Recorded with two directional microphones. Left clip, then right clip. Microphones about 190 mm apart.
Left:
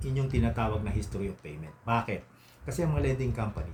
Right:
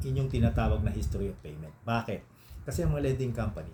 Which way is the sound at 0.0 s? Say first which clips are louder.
Even; centre (ahead or behind).